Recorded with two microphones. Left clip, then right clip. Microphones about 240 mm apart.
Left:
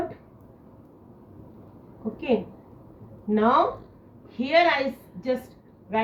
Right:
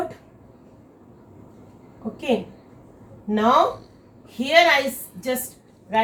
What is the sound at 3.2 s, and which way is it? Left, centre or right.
A woman's voice, right.